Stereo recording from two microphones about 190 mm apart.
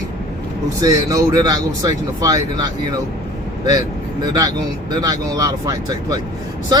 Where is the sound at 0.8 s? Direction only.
20° right (ahead or behind).